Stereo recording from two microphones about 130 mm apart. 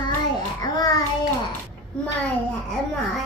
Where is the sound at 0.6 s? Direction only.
30° left (ahead or behind).